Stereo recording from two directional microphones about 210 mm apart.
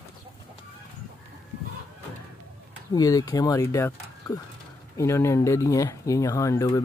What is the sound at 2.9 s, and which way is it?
Speech, 15° left (ahead or behind).